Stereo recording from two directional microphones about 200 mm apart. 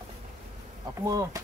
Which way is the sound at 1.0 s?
15° right (ahead or behind).